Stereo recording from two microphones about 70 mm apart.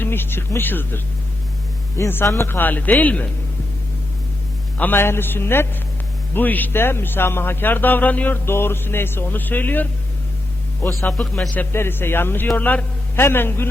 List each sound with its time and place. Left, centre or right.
0.0 s a man's voice: left
2.2 s speech: left
2.5 s speech: left
4.8 s a man's voice: left
8.4 s a man's voice: left
11.2 s a man's voice: centre
11.7 s a man's voice: left